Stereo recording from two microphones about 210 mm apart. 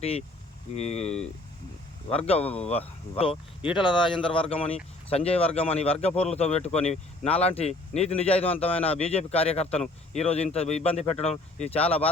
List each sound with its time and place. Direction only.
0.0 s speech: 30° left (ahead or behind)